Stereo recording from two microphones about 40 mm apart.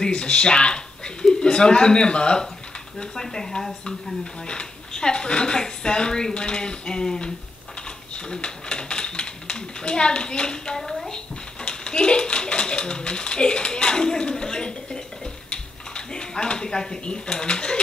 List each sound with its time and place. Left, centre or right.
0.0 s speech: left
8.3 s a sound: left
10.8 s a woman's voice: centre
11.6 s speech: left
15.5 s a sound: left
17.0 s speech: left